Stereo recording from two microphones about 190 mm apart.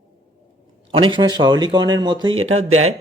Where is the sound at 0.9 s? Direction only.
25° right (ahead or behind).